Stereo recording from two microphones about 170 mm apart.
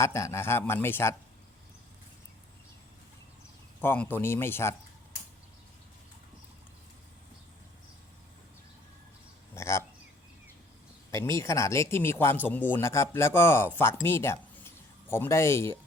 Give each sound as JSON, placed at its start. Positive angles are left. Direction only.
{"t": 0.0, "sound": "speech", "side_deg": 15}
{"t": 3.8, "sound": "speech", "side_deg": 10}
{"t": 9.6, "sound": "speech", "side_deg": 15}
{"t": 11.1, "sound": "speech", "side_deg": 15}